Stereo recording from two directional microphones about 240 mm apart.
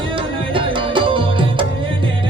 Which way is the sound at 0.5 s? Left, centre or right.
Right.